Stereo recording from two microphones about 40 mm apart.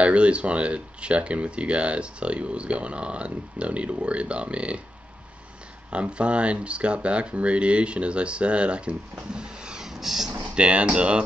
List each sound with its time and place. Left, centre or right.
0.0 s speech: right
5.9 s speech: right
9.8 s vehicle: centre
10.5 s speech: right